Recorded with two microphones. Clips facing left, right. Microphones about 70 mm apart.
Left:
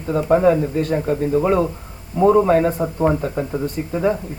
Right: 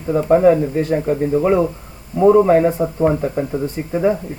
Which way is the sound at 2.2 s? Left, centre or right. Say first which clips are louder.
Right 3 dB; centre.